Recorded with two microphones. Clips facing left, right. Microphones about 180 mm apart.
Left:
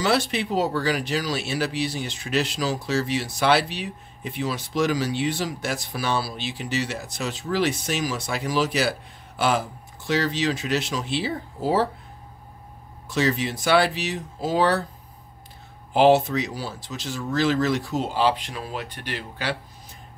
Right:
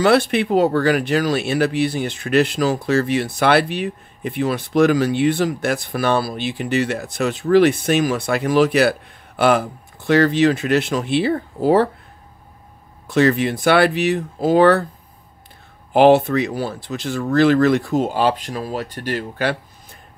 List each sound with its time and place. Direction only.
0.0 s speech: 60° right (ahead or behind)
13.0 s speech: 60° right (ahead or behind)
15.9 s speech: 55° right (ahead or behind)